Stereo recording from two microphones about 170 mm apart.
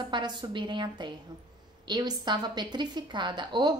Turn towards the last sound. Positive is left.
turn(degrees=-25)  # may be behind; listen again after turning